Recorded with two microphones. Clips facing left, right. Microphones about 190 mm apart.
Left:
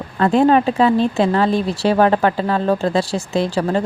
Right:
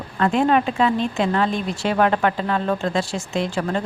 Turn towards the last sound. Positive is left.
turn(degrees=35)  # may be behind; listen again after turning